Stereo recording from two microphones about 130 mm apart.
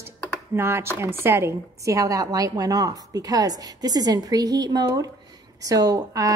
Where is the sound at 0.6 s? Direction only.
20° right (ahead or behind).